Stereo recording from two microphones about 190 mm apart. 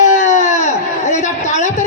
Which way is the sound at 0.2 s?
40° left (ahead or behind).